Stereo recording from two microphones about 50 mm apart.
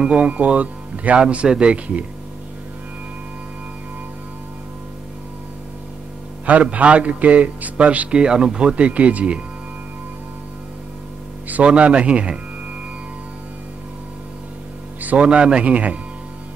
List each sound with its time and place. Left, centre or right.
0.2 s a man's voice: right
6.4 s a man's voice: right
8.1 s a man's voice: centre
11.4 s a man's voice: right
15.1 s a man's voice: centre